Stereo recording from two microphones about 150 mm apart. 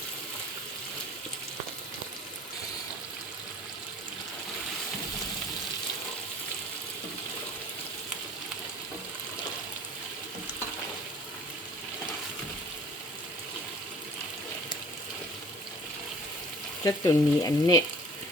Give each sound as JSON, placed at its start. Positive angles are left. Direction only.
{"t": 16.8, "sound": "frying", "side_deg": 20}